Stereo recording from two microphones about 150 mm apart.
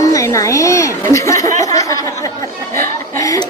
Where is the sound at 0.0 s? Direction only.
20° left (ahead or behind).